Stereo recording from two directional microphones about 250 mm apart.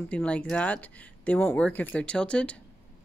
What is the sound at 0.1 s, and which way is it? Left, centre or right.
Speech, centre.